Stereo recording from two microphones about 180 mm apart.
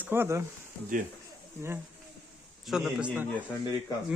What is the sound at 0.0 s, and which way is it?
Speech, 10° right (ahead or behind).